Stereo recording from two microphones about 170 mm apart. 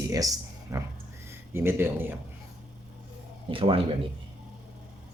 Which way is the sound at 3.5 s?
30° right (ahead or behind).